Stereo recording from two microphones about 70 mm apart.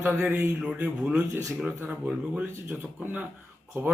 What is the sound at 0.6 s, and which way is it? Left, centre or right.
Speech, centre.